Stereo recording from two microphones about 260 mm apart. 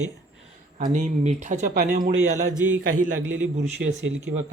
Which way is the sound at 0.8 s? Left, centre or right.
Right.